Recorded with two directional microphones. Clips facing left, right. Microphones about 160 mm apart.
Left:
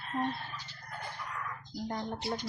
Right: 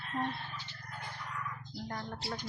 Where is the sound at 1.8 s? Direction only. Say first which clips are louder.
Left 5 dB; 20° left (ahead or behind).